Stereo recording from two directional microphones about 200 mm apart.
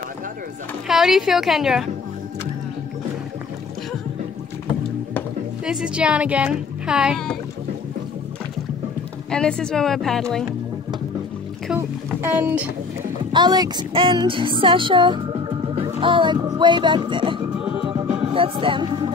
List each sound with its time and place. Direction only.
0.8 s speech: centre (ahead or behind)
5.7 s speech: 5° right (ahead or behind)
9.3 s speech: 5° left (ahead or behind)
12.2 s speech: 10° right (ahead or behind)
13.3 s music: 20° right (ahead or behind)